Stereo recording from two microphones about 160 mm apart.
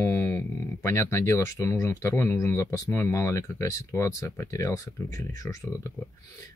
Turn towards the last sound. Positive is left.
turn(degrees=20)  # may be behind; listen again after turning